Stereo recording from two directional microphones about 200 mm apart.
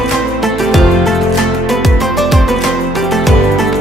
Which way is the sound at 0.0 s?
Centre (ahead or behind).